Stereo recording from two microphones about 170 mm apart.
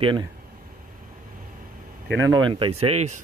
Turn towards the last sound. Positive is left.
turn(degrees=-40)  # may be behind; listen again after turning